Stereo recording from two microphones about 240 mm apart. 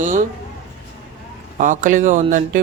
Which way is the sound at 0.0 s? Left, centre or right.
Right.